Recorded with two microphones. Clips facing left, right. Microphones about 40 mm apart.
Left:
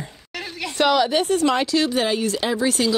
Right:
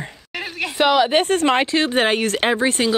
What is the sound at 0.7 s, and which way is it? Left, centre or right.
Speech, centre.